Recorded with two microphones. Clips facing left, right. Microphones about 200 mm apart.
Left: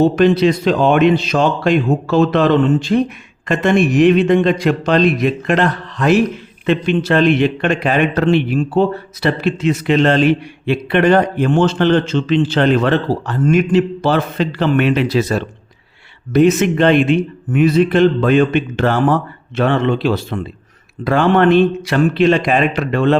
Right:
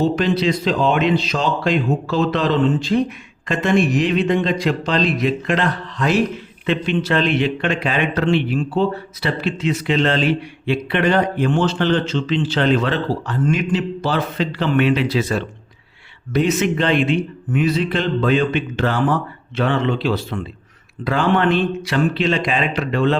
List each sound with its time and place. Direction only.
0.0 s a man's voice: 55° left (ahead or behind)